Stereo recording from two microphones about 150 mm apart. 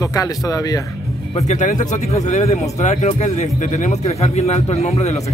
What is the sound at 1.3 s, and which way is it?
Speech, 55° left (ahead or behind).